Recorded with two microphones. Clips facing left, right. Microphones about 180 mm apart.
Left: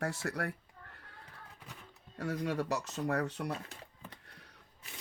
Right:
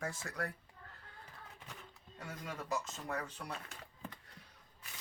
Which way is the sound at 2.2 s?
70° left (ahead or behind).